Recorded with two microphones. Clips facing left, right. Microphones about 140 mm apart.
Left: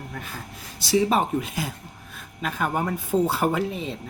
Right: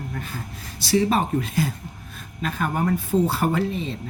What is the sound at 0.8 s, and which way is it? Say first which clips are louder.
Speech: even; 15° left (ahead or behind).